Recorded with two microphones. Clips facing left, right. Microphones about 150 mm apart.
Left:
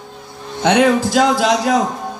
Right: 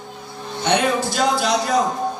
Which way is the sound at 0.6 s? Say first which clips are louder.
Left 6 dB; 90° left.